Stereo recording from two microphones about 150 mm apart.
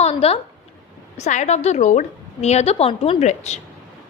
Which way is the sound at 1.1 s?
50° left (ahead or behind).